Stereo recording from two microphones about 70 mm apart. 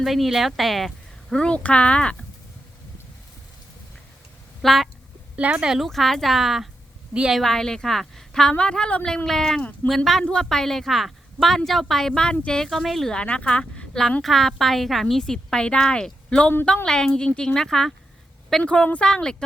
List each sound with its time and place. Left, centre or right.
0.0 s a woman's voice: centre
4.6 s a woman's voice: centre
5.4 s speech: centre
5.7 s a woman's voice: centre
7.1 s a woman's voice: centre
7.3 s a woman's voice: centre
13.1 s a woman's voice: centre
18.6 s a woman's voice: centre